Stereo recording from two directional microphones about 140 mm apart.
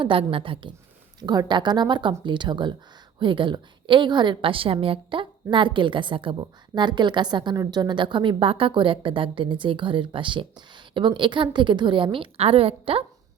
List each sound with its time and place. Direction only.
0.0 s a woman's voice: 40° right (ahead or behind)